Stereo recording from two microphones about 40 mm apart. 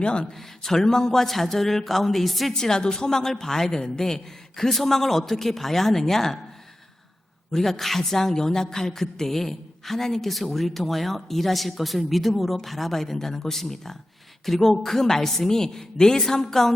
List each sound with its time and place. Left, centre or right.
0.0 s speech: left
0.3 s a woman's voice: centre
2.5 s a woman's voice: centre
7.5 s a woman's voice: centre